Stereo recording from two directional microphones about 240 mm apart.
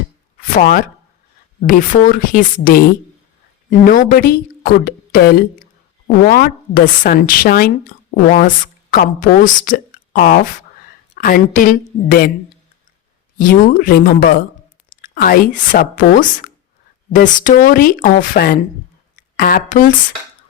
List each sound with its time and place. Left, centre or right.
0.3 s a sound: left
1.6 s a woman's voice: left
13.4 s speech: left